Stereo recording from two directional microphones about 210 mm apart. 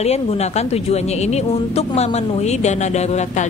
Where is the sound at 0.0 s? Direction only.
30° left (ahead or behind).